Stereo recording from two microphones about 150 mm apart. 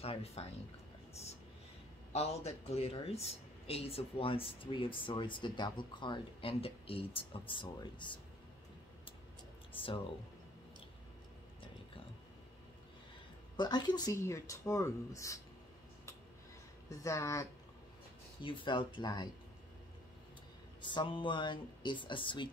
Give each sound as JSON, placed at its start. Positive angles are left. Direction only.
{"t": 0.0, "sound": "speech", "side_deg": 40}
{"t": 2.1, "sound": "speech", "side_deg": 45}
{"t": 13.6, "sound": "speech", "side_deg": 30}
{"t": 16.9, "sound": "speech", "side_deg": 20}
{"t": 18.4, "sound": "speech", "side_deg": 35}
{"t": 20.8, "sound": "speech", "side_deg": 30}